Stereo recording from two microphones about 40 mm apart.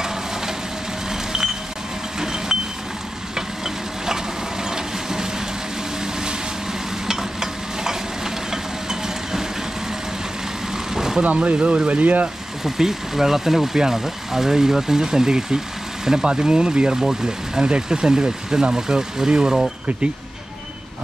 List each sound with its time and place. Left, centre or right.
0.0 s a sound: centre
1.1 s vehicle: centre
3.3 s a sound: centre
7.1 s stir: centre
10.7 s vehicle: centre
11.2 s speech: right
12.6 s speech: centre